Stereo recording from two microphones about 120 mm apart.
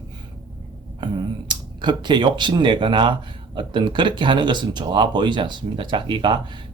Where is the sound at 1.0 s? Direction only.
40° right (ahead or behind).